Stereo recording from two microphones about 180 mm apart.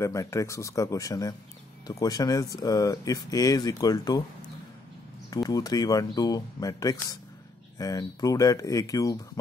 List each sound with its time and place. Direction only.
0.0 s speech: 15° left (ahead or behind)
5.3 s speech: 20° left (ahead or behind)